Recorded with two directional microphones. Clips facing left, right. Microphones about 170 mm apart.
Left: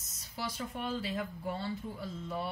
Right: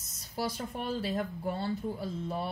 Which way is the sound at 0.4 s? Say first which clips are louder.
Right 4 dB; 45° right (ahead or behind).